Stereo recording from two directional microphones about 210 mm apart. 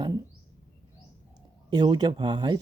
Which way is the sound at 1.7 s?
20° right (ahead or behind).